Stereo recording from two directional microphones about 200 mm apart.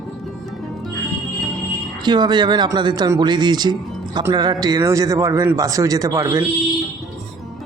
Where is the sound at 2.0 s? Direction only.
20° right (ahead or behind).